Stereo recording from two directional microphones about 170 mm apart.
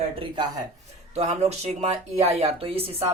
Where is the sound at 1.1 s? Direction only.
35° right (ahead or behind).